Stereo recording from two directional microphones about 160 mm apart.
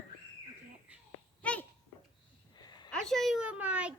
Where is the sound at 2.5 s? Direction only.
25° left (ahead or behind).